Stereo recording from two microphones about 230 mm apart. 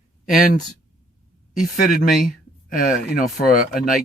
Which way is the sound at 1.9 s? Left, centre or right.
Left.